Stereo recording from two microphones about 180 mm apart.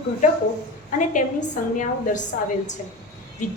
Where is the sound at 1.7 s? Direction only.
45° left (ahead or behind).